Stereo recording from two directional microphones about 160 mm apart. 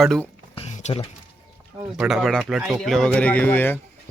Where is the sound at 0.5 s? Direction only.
40° left (ahead or behind).